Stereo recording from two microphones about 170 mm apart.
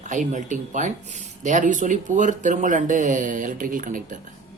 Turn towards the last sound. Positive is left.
turn(degrees=-50)  # may be behind; listen again after turning